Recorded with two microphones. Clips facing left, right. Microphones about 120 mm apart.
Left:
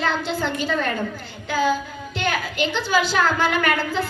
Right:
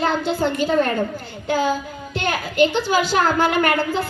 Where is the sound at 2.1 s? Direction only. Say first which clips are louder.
Right 2 dB; 50° right (ahead or behind).